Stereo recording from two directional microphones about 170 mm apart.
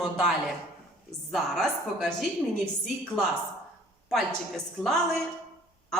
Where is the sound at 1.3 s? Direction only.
Centre (ahead or behind).